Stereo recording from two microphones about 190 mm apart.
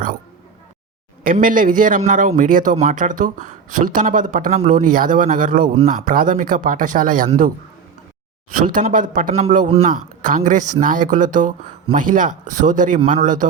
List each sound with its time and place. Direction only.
1.2 s speech: 45° right (ahead or behind)